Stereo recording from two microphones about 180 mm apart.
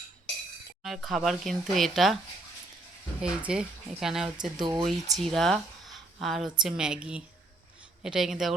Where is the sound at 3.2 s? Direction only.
5° right (ahead or behind).